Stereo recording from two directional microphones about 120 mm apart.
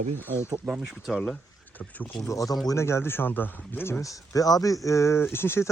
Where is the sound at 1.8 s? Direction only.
15° left (ahead or behind).